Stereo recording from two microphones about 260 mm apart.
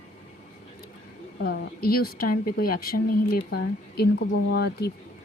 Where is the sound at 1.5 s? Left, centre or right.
Left.